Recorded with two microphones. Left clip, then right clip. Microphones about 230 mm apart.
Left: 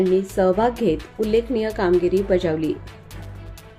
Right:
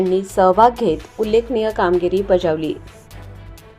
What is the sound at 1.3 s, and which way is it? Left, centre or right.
A woman's voice, centre.